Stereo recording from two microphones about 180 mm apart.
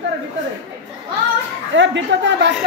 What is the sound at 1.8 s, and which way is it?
Speech, 90° right.